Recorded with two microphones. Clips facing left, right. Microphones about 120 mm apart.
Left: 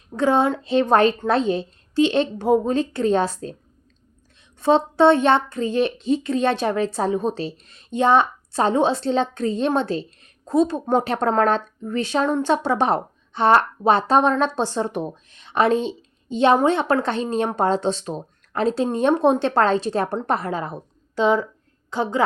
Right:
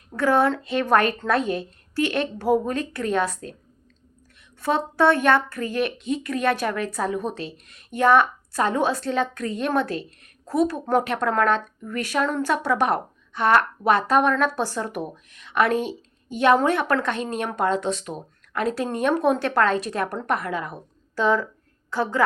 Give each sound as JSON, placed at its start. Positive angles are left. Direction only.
{"t": 0.2, "sound": "a woman's voice", "side_deg": 20}
{"t": 4.6, "sound": "a woman's voice", "side_deg": 25}
{"t": 21.2, "sound": "a woman's voice", "side_deg": 20}